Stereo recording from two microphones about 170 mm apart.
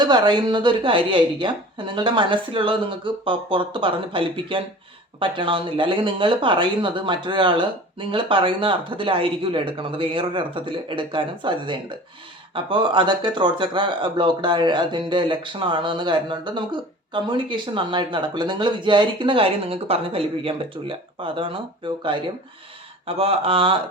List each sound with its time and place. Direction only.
0.0 s speech: 25° right (ahead or behind)